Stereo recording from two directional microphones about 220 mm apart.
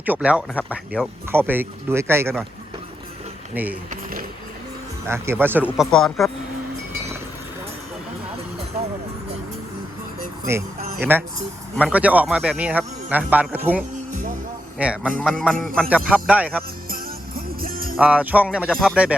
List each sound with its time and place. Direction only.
0.0 s speech: 5° right (ahead or behind)
3.5 s speech: 10° right (ahead or behind)
3.8 s a sound: 40° right (ahead or behind)
5.0 s speech: 10° right (ahead or behind)
10.5 s speech: 10° right (ahead or behind)
14.1 s music: 35° right (ahead or behind)
14.8 s speech: 5° right (ahead or behind)
15.2 s music: centre (ahead or behind)
16.9 s music: 40° right (ahead or behind)
17.9 s music: 5° right (ahead or behind)